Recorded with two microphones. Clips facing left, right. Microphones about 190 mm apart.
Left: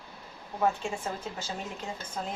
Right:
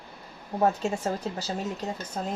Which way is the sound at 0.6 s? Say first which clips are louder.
Right 4 dB; 40° right (ahead or behind).